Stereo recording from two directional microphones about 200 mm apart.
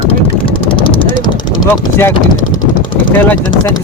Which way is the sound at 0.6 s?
25° left (ahead or behind).